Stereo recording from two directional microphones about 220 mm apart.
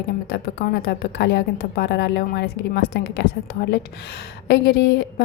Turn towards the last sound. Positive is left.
turn(degrees=50)  # may be behind; listen again after turning